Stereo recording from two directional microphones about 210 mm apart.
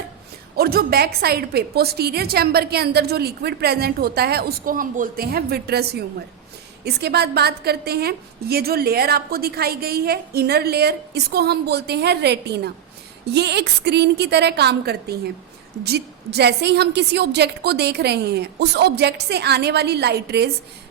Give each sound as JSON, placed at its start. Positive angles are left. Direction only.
{"t": 0.5, "sound": "a woman's voice", "side_deg": -45}